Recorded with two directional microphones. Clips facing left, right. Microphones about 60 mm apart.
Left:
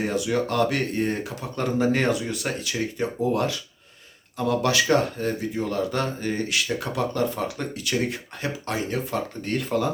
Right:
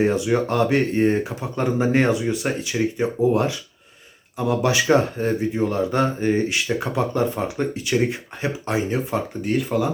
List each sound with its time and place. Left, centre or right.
0.0 s speech: right
9.4 s speech: centre